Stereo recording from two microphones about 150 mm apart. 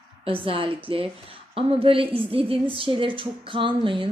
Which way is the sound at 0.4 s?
35° right (ahead or behind).